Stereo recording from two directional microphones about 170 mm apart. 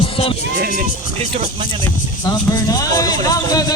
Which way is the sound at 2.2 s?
25° left (ahead or behind).